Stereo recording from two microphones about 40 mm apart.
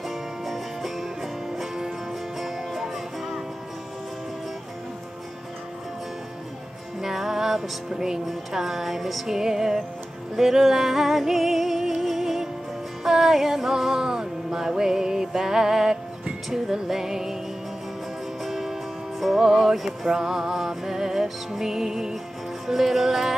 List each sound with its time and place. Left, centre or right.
0.1 s music: centre
7.0 s music: centre
7.9 s music: centre
8.3 s music: centre
18.4 s music: centre